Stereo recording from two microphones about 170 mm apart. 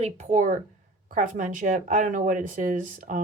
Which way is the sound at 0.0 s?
45° right (ahead or behind).